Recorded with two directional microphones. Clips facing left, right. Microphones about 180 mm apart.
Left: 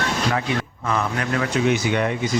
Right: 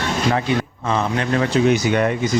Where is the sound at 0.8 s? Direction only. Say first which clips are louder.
Right 3 dB; 30° right (ahead or behind); by 2.1 s 45° right (ahead or behind).